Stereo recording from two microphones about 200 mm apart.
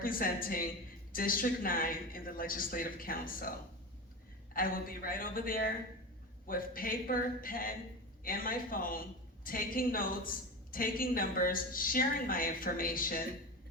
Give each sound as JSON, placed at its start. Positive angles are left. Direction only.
{"t": 0.0, "sound": "a woman's voice", "side_deg": 45}
{"t": 4.5, "sound": "a woman's voice", "side_deg": 45}